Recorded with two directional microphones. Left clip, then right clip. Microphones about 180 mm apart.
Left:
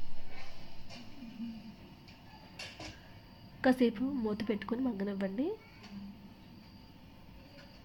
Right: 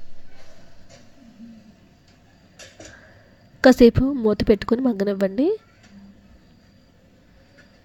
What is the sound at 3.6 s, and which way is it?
Speech, 45° right (ahead or behind).